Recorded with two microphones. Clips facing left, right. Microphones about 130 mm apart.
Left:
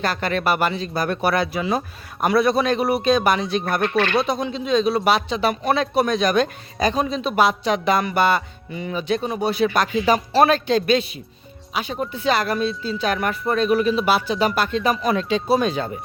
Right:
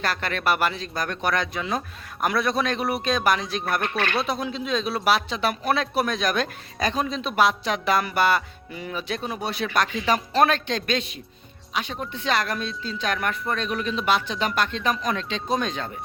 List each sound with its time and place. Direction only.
0.0 s speech: centre (ahead or behind)